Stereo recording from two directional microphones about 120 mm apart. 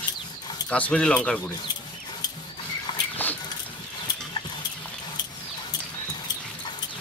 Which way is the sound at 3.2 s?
15° left (ahead or behind).